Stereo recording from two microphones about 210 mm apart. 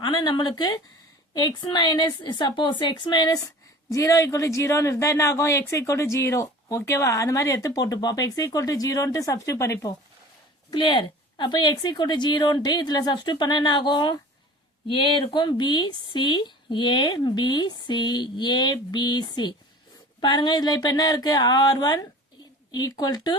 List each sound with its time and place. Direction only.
0.0 s speech: 20° left (ahead or behind)